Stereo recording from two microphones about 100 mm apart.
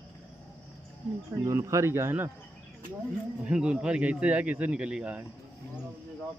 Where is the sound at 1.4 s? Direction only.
30° right (ahead or behind).